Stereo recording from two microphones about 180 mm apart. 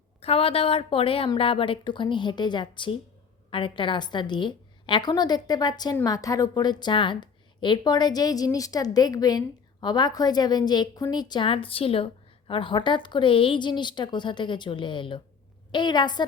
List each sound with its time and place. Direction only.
0.2 s a woman's voice: 35° left (ahead or behind)